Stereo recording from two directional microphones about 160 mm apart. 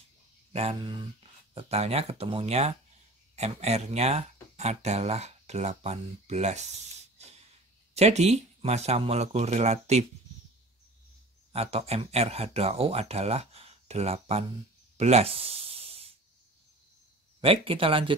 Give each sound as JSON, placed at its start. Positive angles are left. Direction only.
{"t": 0.5, "sound": "speech", "side_deg": -40}
{"t": 7.2, "sound": "hiss", "side_deg": -40}
{"t": 7.9, "sound": "speech", "side_deg": -40}
{"t": 11.5, "sound": "speech", "side_deg": -40}
{"t": 15.0, "sound": "a sound", "side_deg": -40}
{"t": 17.4, "sound": "speech", "side_deg": -35}